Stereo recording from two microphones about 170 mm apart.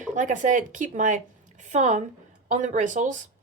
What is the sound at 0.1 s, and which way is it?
A woman's voice, 45° right (ahead or behind).